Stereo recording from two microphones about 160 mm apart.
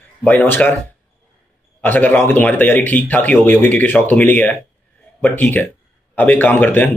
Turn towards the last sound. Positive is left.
turn(degrees=10)  # may be behind; listen again after turning